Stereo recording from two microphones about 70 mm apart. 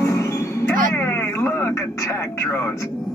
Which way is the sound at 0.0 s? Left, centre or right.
Left.